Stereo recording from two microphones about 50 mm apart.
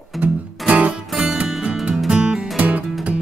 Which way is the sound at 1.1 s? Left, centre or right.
Centre.